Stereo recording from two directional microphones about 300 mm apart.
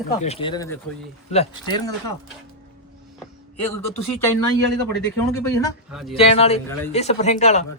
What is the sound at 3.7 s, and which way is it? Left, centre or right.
Speech, left.